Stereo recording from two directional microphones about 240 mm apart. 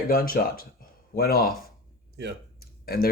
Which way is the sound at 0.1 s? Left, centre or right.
Left.